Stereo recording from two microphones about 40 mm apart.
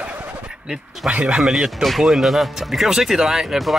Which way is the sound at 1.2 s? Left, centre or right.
Centre.